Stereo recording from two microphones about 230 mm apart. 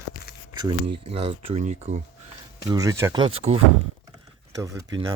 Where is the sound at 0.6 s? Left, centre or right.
Right.